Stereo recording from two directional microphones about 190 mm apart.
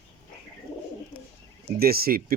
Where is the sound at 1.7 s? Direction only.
55° right (ahead or behind).